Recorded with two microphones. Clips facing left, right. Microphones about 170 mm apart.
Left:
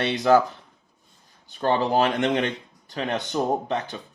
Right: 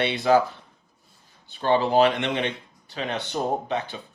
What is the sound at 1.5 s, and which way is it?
Speech, 45° left (ahead or behind).